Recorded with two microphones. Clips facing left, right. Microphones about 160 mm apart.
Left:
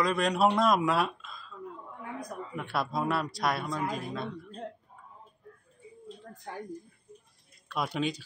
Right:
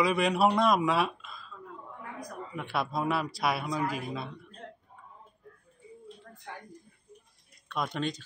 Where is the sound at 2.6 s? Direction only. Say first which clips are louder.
Even; centre (ahead or behind).